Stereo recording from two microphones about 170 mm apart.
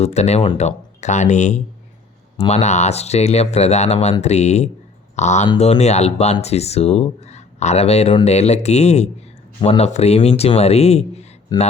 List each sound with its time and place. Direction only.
0.0 s speech: 40° left (ahead or behind)